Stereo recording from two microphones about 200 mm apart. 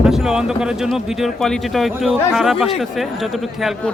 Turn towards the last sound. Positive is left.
turn(degrees=0)  # may be behind; listen again after turning